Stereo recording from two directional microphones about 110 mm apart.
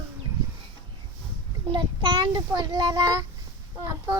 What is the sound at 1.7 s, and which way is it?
Child singing, 45° right (ahead or behind).